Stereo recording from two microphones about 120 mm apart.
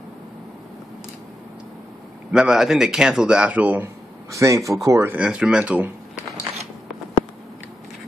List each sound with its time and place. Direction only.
2.3 s a man's voice: 5° right (ahead or behind); by 5.2 s 20° right (ahead or behind)
5.2 s speech: 10° right (ahead or behind)